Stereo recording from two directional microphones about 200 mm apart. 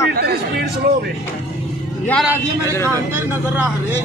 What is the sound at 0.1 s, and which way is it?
Speech, 50° right (ahead or behind).